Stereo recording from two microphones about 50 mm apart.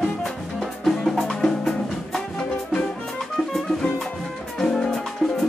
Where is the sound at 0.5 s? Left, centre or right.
Centre.